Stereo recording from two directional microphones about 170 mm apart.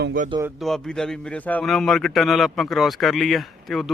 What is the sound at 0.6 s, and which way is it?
A man's voice, centre (ahead or behind).